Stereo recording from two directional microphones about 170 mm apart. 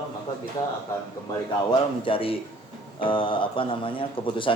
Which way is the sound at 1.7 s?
30° left (ahead or behind).